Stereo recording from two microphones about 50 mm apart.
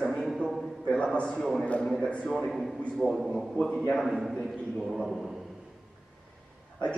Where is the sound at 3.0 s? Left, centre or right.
Centre.